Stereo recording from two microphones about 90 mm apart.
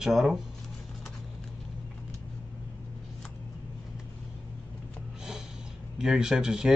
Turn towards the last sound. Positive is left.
turn(degrees=-5)  # may be behind; listen again after turning